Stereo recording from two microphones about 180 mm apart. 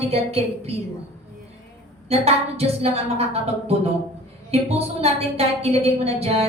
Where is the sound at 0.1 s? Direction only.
35° right (ahead or behind).